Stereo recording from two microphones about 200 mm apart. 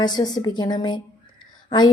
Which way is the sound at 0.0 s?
20° left (ahead or behind).